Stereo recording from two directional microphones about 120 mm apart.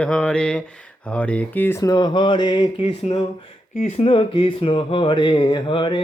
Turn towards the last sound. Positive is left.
turn(degrees=45)  # may be behind; listen again after turning